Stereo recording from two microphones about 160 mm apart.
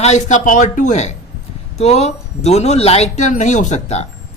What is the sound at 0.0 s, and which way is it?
Speech, 45° left (ahead or behind).